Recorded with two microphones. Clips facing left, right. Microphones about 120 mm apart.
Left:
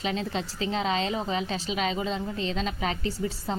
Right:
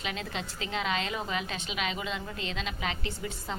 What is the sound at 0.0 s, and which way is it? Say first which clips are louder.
A woman's voice: left 6 dB; 35° left (ahead or behind).